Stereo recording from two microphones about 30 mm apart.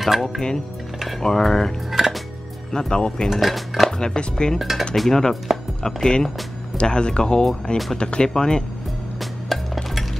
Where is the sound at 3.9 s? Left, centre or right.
Left.